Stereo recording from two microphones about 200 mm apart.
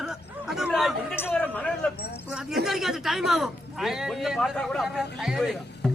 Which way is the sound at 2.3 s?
5° right (ahead or behind).